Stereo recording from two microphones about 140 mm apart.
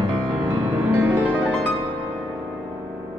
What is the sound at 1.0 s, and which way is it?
Music, 10° right (ahead or behind).